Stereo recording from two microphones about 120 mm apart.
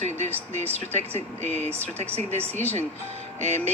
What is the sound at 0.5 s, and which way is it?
Speech, 65° right (ahead or behind).